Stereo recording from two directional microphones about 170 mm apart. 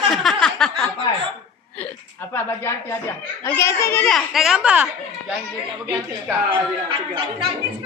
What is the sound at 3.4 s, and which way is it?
Speech, 15° left (ahead or behind).